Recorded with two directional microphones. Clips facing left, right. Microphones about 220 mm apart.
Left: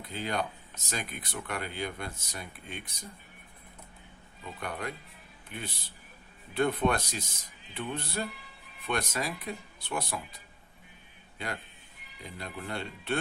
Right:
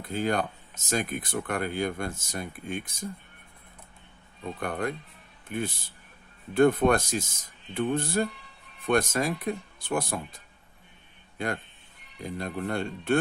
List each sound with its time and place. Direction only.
0.0 s speech: 50° right (ahead or behind)
4.6 s speech: 50° right (ahead or behind)